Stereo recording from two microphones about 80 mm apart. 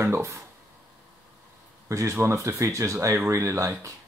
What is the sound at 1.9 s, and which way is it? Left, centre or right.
Speech, right.